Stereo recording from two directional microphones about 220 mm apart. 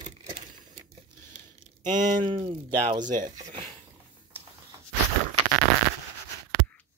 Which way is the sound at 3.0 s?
35° right (ahead or behind).